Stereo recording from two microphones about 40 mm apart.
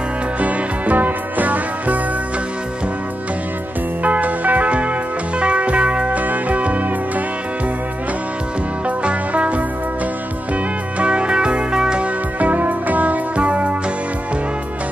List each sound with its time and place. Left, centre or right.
0.4 s music: right
4.0 s music: right
8.8 s music: right
12.0 s music: right